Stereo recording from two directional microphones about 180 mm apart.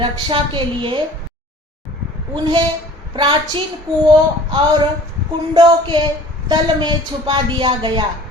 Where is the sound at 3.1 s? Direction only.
25° right (ahead or behind).